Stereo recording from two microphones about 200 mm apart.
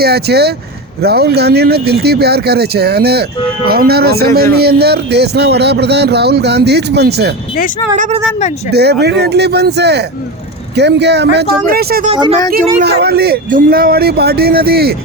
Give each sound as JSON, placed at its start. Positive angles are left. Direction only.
{"t": 0.0, "sound": "speech", "side_deg": -55}
{"t": 8.7, "sound": "speech", "side_deg": -55}
{"t": 12.1, "sound": "speech", "side_deg": -25}
{"t": 12.8, "sound": "speech", "side_deg": -55}